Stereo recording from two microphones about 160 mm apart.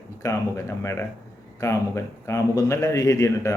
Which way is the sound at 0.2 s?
20° left (ahead or behind).